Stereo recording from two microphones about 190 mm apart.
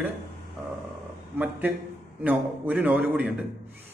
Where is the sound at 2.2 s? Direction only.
10° right (ahead or behind).